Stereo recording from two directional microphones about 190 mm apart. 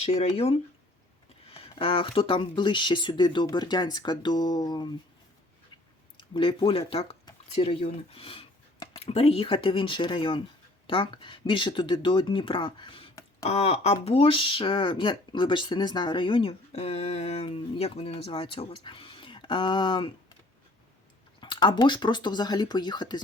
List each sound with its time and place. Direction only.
0.0 s speech: 35° left (ahead or behind)
6.1 s speech: 25° left (ahead or behind)
21.4 s speech: 25° left (ahead or behind)